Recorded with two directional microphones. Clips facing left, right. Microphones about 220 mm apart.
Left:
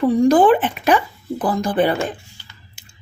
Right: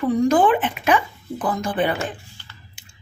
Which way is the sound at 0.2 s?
35° left (ahead or behind).